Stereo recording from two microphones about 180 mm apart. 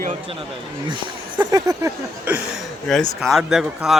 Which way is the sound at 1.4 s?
20° right (ahead or behind).